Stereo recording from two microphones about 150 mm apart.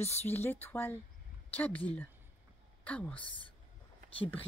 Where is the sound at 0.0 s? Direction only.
45° left (ahead or behind).